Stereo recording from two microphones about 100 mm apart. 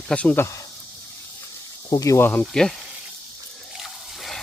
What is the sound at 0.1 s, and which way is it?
Speech, 15° left (ahead or behind).